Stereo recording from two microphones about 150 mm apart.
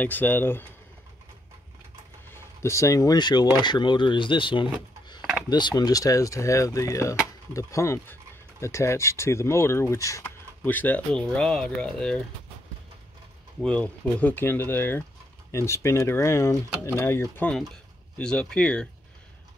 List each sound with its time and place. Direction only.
0.0 s speech: 10° left (ahead or behind)
2.3 s speech: 20° left (ahead or behind)
13.7 s speech: 10° left (ahead or behind)